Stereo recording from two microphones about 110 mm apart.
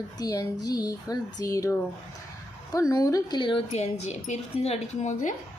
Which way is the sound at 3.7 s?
80° left.